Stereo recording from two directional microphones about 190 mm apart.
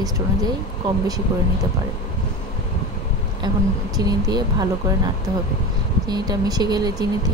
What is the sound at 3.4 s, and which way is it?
Speech, 20° right (ahead or behind).